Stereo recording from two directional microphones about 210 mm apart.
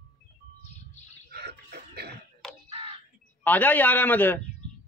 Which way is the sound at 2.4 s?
Centre (ahead or behind).